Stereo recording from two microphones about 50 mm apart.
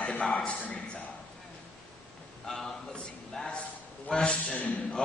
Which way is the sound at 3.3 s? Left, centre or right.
Centre.